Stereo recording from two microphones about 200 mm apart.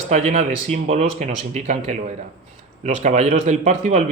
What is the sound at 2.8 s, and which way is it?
Speech, 35° right (ahead or behind).